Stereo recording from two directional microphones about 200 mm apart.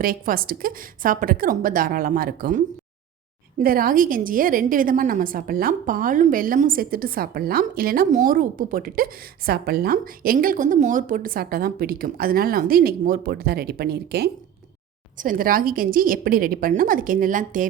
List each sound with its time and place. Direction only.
0.0 s a woman's voice: 45° right (ahead or behind)